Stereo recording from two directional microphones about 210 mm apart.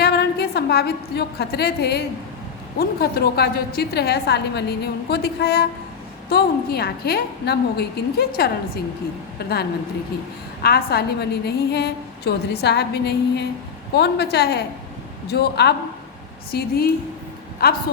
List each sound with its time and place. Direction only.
0.0 s a woman's voice: 50° left (ahead or behind)
10.6 s a woman's voice: 50° left (ahead or behind)